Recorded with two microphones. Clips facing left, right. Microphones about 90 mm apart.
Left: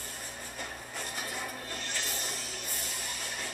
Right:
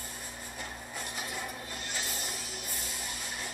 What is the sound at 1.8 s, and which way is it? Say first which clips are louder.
Music: right 1 dB; 15° right (ahead or behind).